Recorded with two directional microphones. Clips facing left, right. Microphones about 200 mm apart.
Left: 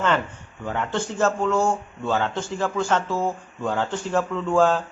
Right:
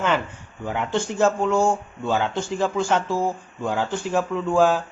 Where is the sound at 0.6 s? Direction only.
10° right (ahead or behind).